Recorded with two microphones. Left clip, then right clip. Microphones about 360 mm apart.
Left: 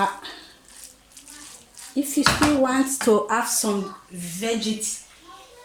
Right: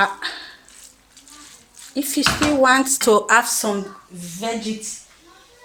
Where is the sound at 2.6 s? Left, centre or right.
Right.